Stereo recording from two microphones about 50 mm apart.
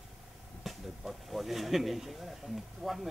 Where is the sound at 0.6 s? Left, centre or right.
Centre.